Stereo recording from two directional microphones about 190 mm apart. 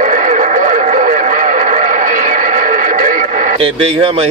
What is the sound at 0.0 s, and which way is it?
Radio, 40° right (ahead or behind).